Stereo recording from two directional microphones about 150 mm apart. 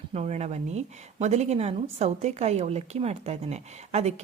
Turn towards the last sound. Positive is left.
turn(degrees=-45)  # may be behind; listen again after turning